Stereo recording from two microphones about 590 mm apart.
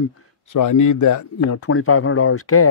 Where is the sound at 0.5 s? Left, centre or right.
Left.